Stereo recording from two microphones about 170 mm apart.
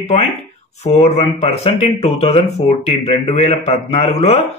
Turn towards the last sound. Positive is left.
turn(degrees=40)  # may be behind; listen again after turning